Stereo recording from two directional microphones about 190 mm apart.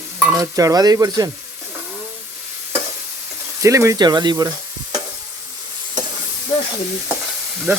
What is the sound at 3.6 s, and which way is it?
Speech, 15° right (ahead or behind).